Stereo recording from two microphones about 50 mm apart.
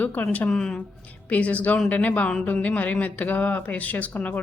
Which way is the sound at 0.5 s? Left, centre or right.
Centre.